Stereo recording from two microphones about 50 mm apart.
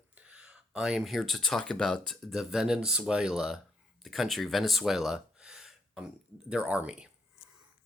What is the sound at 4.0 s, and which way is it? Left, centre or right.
Speech, centre.